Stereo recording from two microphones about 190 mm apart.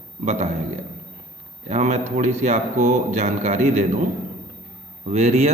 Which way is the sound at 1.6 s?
35° right (ahead or behind).